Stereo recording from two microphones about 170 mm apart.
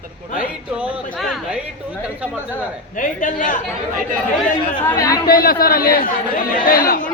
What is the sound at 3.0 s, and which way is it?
Speech, 50° left (ahead or behind).